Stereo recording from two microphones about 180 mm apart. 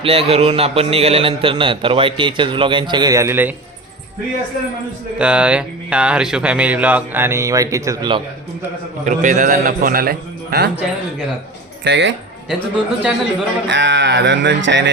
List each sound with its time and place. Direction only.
0.0 s a man's voice: 30° right (ahead or behind); by 3.5 s 15° right (ahead or behind)
5.1 s speech: 5° right (ahead or behind); by 8.2 s 20° right (ahead or behind)
9.0 s a man's voice: 45° right (ahead or behind)
11.9 s speech: 75° right (ahead or behind)
12.5 s a man's voice: 5° right (ahead or behind)
13.7 s speech: 80° right